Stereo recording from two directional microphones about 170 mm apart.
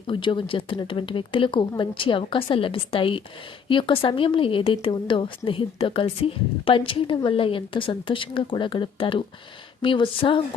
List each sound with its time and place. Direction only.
0.1 s a woman's voice: 30° left (ahead or behind)